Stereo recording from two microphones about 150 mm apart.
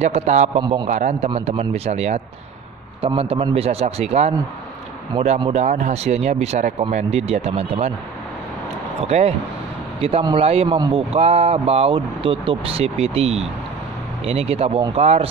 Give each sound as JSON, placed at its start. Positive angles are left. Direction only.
{"t": 0.0, "sound": "speech", "side_deg": -45}
{"t": 0.6, "sound": "speech", "side_deg": -30}
{"t": 0.8, "sound": "speech", "side_deg": -50}
{"t": 5.5, "sound": "speech", "side_deg": -50}
{"t": 9.0, "sound": "speech", "side_deg": -45}